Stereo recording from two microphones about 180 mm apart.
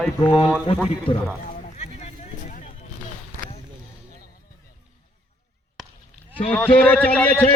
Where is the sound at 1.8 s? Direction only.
40° left (ahead or behind).